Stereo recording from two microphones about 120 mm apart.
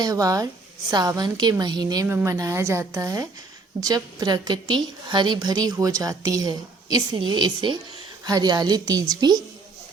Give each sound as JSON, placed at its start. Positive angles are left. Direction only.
{"t": 0.0, "sound": "a woman's voice", "side_deg": -30}
{"t": 2.0, "sound": "a woman's voice", "side_deg": -20}